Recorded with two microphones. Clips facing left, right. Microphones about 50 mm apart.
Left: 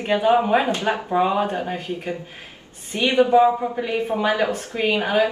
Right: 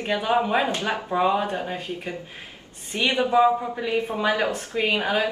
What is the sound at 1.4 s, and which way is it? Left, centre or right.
Speech, left.